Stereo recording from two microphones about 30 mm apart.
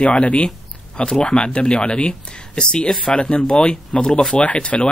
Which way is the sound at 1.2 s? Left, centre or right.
Left.